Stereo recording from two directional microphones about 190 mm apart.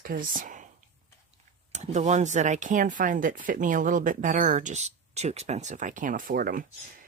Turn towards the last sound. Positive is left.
turn(degrees=-45)  # may be behind; listen again after turning